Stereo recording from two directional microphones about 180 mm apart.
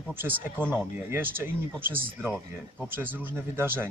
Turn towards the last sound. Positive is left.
turn(degrees=-15)  # may be behind; listen again after turning